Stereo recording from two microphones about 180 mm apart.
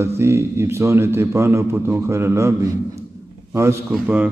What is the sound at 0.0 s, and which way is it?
A man's voice, 15° right (ahead or behind).